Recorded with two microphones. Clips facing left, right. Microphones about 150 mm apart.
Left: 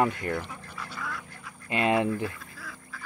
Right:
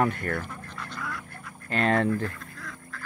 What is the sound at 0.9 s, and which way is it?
Quack, centre (ahead or behind).